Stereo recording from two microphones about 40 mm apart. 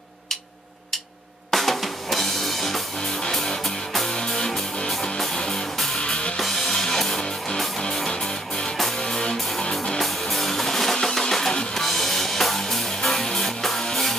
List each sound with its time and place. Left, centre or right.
1.5 s music: centre; by 6.3 s left
6.3 s music: centre